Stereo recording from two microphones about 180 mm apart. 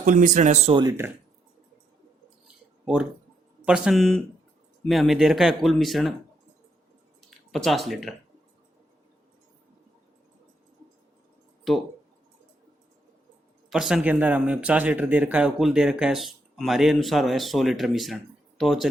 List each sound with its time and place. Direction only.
0.0 s speech: 45° right (ahead or behind)
0.8 s speech: 15° right (ahead or behind)
2.8 s speech: 5° right (ahead or behind)
7.2 s a sound: centre (ahead or behind)
11.7 s speech: centre (ahead or behind)
13.7 s speech: centre (ahead or behind)